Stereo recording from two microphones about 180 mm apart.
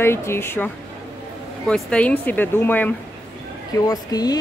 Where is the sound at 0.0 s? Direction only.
15° left (ahead or behind).